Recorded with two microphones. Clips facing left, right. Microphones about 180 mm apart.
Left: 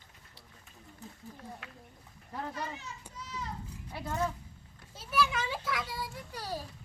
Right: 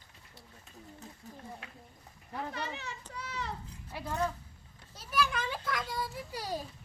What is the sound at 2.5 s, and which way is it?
Speech, 70° right (ahead or behind).